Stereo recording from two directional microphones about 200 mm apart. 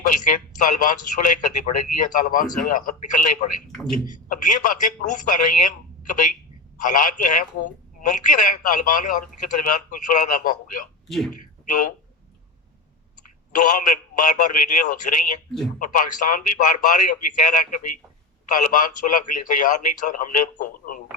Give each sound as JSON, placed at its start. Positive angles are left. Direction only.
{"t": 0.3, "sound": "a man's voice", "side_deg": 40}
{"t": 13.5, "sound": "a man's voice", "side_deg": 40}